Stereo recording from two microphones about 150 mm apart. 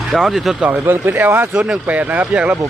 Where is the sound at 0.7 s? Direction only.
15° right (ahead or behind).